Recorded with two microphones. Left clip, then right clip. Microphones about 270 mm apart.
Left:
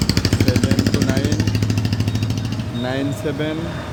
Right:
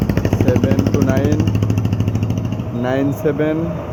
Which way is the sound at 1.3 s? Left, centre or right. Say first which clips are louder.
Right 3 dB; left.